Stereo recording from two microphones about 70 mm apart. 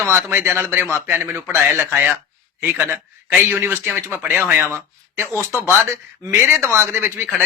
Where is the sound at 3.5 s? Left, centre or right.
Right.